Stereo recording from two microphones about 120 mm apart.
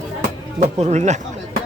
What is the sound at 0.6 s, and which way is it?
Speech, 70° right (ahead or behind).